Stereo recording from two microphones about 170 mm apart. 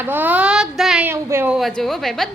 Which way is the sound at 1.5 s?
Centre (ahead or behind).